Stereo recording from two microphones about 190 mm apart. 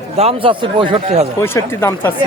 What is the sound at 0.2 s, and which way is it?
A man's voice, 30° right (ahead or behind).